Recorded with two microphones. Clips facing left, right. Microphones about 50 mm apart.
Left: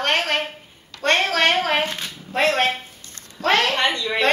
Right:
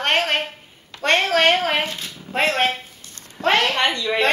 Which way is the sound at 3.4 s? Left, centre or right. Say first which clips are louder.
Right 1 dB; right.